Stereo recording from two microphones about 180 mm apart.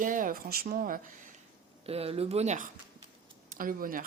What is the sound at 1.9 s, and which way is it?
A woman's voice, 35° right (ahead or behind).